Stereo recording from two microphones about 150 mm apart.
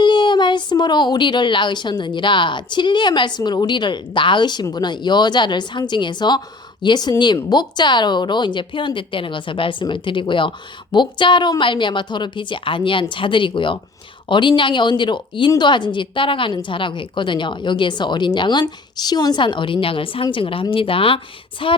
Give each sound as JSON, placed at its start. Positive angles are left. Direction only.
{"t": 0.0, "sound": "speech", "side_deg": 30}